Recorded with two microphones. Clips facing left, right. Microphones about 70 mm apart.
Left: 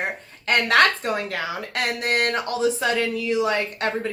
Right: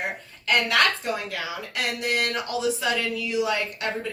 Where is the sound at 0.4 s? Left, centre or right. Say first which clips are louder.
Left 4 dB; left.